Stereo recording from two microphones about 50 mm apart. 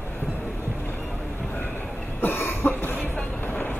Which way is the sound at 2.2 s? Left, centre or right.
Left.